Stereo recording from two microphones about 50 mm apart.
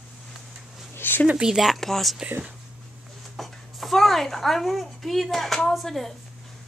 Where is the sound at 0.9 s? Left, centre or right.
Left.